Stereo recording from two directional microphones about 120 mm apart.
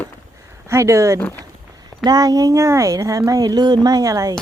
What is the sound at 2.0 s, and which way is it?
Speech, 35° right (ahead or behind).